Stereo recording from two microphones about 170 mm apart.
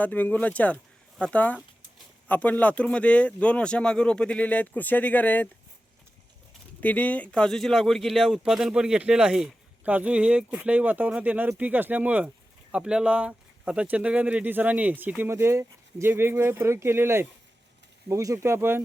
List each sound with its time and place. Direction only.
0.0 s speech: 10° left (ahead or behind)
6.8 s speech: 10° left (ahead or behind); by 18.8 s 15° right (ahead or behind)